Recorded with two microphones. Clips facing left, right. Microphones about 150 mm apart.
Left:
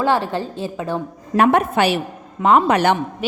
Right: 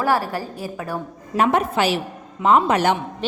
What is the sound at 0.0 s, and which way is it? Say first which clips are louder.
Speech: left 2 dB; 25° left (ahead or behind).